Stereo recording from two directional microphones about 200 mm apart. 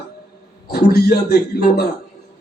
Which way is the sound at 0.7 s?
50° left (ahead or behind).